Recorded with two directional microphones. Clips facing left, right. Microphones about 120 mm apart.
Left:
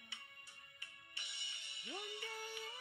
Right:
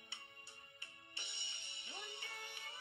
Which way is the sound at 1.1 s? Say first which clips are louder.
Even; 30° right (ahead or behind).